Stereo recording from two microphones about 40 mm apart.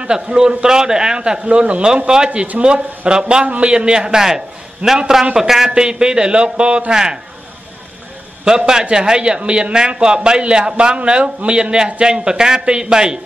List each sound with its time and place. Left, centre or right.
0.0 s a man's voice: centre
8.5 s a man's voice: centre